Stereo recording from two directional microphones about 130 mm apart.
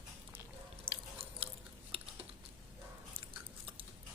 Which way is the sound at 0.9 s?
45° right (ahead or behind).